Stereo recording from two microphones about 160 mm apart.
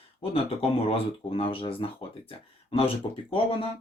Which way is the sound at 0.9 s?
35° left (ahead or behind).